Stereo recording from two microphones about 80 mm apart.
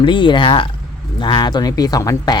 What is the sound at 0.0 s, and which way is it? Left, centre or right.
Speech, left.